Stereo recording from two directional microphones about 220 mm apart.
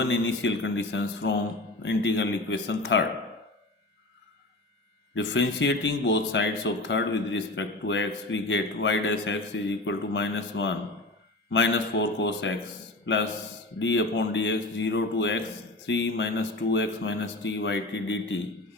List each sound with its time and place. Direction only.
0.0 s speech: 55° left (ahead or behind)
5.1 s speech: 55° left (ahead or behind)